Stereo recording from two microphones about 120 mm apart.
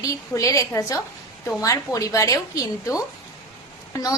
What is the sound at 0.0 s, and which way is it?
A woman's voice, 25° left (ahead or behind).